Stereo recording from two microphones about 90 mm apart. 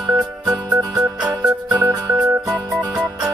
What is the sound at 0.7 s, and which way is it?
Music, 45° right (ahead or behind).